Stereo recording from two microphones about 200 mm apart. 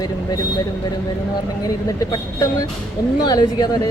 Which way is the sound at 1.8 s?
15° left (ahead or behind).